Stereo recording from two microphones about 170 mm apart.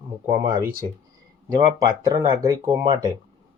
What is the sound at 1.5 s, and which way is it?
Speech, 25° right (ahead or behind).